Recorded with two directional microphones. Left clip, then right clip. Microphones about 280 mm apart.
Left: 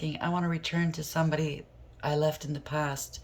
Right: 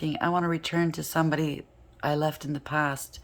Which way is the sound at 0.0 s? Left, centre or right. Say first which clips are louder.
Right 6 dB; centre.